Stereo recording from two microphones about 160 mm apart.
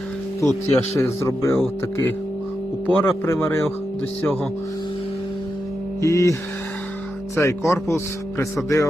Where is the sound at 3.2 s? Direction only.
15° left (ahead or behind).